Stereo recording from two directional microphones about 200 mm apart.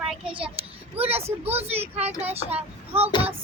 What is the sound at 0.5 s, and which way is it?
A child's voice, 30° right (ahead or behind).